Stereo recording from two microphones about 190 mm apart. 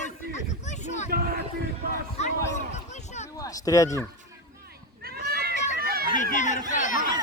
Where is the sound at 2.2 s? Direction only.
35° left (ahead or behind).